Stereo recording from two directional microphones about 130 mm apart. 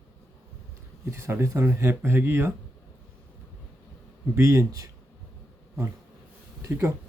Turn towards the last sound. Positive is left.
turn(degrees=-20)  # may be behind; listen again after turning